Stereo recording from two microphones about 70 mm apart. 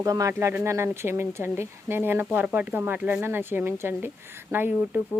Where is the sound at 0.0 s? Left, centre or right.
Right.